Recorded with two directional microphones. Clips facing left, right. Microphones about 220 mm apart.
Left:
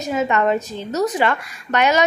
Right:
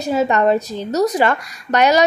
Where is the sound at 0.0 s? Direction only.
35° right (ahead or behind).